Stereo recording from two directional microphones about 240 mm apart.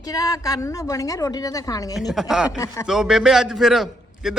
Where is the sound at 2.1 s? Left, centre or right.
Centre.